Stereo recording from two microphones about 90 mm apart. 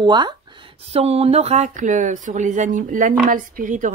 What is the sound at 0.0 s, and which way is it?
Speech, 55° right (ahead or behind).